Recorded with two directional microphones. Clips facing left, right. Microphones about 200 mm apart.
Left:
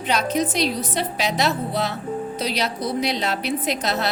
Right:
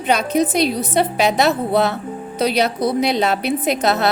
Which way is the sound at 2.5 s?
60° right (ahead or behind).